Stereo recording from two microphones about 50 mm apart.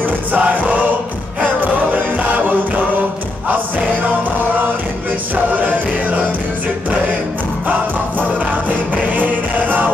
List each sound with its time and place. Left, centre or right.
0.4 s music: right
5.3 s music: right
8.2 s music: right